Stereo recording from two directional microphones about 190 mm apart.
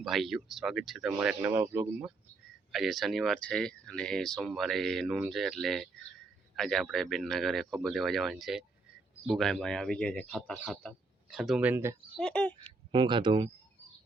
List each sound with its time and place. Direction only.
0.0 s speech: centre (ahead or behind)
2.7 s speech: centre (ahead or behind)
12.1 s speech: 5° left (ahead or behind)
12.5 s speech: 25° right (ahead or behind)